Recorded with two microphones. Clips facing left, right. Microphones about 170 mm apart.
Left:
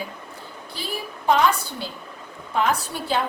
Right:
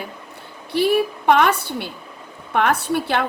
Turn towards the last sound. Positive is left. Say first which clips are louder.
# right 4 dB
turn(degrees=-65)  # may be behind; listen again after turning